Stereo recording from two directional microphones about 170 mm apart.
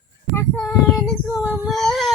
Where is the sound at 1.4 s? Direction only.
10° right (ahead or behind).